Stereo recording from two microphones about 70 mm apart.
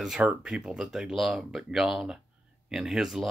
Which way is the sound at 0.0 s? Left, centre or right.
Centre.